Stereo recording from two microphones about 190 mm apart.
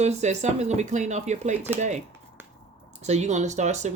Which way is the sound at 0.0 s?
35° right (ahead or behind).